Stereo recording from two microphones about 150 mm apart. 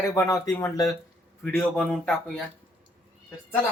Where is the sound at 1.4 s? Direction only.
5° left (ahead or behind).